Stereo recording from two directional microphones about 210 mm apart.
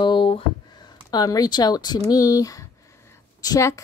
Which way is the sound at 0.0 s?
25° left (ahead or behind).